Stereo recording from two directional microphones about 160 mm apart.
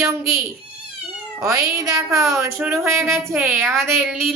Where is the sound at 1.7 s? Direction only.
20° right (ahead or behind).